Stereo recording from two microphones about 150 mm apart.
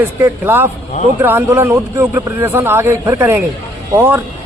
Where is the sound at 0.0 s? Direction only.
15° right (ahead or behind).